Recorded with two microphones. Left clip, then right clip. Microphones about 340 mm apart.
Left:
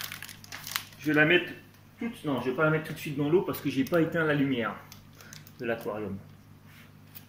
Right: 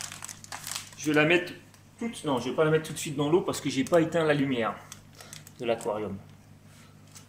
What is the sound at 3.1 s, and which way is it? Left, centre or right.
Speech, centre.